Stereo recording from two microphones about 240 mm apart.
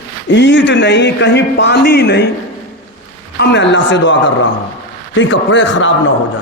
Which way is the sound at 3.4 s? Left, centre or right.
Left.